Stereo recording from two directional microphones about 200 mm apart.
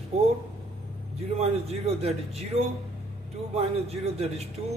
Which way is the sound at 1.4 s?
30° right (ahead or behind).